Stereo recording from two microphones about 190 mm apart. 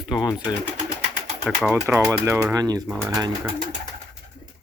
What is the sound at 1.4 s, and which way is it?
Speech, 10° right (ahead or behind).